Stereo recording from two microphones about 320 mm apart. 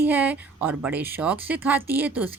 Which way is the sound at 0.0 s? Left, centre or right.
Centre.